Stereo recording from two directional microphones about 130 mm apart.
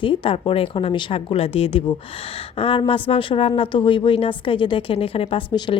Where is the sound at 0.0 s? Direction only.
40° left (ahead or behind).